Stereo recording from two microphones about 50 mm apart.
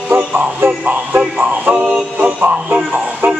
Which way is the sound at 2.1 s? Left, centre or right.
Right.